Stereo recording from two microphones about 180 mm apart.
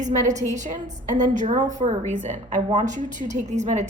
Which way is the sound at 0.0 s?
40° right (ahead or behind).